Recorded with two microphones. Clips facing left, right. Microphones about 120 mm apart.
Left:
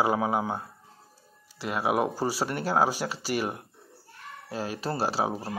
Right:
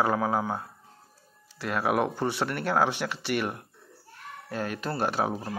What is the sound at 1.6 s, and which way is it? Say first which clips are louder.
Speech: even; 25° left (ahead or behind).